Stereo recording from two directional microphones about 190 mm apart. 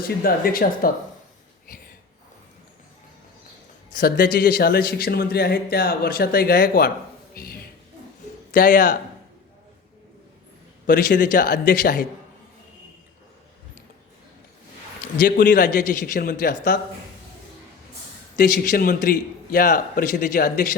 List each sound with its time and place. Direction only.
0.2 s a man's voice: 50° left (ahead or behind)
3.8 s a man's voice: 50° left (ahead or behind)
7.3 s a sound: 50° left (ahead or behind)
8.5 s a man's voice: 45° left (ahead or behind)
10.8 s a man's voice: 45° left (ahead or behind)
15.2 s a man's voice: 50° left (ahead or behind)
18.3 s a man's voice: 60° left (ahead or behind)